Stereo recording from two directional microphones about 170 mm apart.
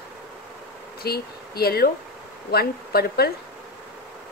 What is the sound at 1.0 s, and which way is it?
Speech, 65° left (ahead or behind).